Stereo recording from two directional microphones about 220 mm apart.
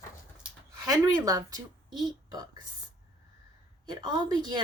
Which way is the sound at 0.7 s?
15° right (ahead or behind).